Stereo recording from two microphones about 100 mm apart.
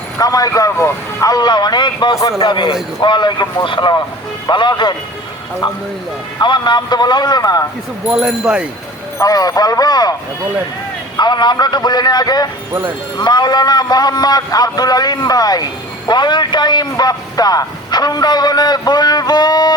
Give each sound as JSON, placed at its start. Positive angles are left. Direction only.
{"t": 0.2, "sound": "a man's voice", "side_deg": 40}
{"t": 6.4, "sound": "a man's voice", "side_deg": 50}
{"t": 8.0, "sound": "speech", "side_deg": -10}
{"t": 9.1, "sound": "a man's voice", "side_deg": 35}
{"t": 11.2, "sound": "a man's voice", "side_deg": 45}